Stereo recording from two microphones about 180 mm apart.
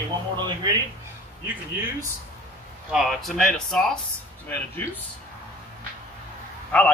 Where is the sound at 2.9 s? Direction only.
Centre (ahead or behind).